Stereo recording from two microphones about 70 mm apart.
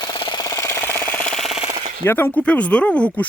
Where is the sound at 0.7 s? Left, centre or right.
Left.